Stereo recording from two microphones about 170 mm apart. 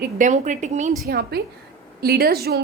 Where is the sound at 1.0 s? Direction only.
70° right (ahead or behind).